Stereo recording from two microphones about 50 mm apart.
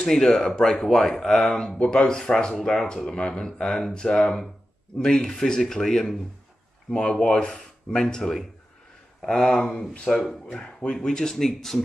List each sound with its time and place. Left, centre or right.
0.0 s speech: centre
1.8 s speech: left
10.0 s speech: centre